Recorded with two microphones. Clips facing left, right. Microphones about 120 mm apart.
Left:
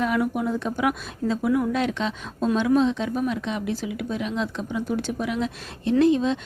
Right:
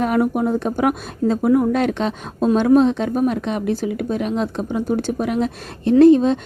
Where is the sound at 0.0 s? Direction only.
45° right (ahead or behind).